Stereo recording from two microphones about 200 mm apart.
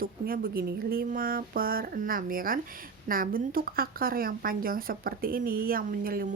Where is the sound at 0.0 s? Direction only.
45° right (ahead or behind).